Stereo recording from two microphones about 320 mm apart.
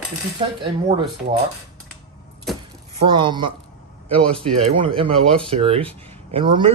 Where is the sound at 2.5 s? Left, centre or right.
Centre.